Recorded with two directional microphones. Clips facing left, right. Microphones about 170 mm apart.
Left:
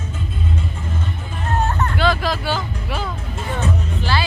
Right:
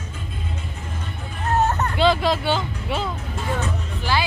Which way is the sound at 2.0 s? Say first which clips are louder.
Right 3 dB; 25° right (ahead or behind).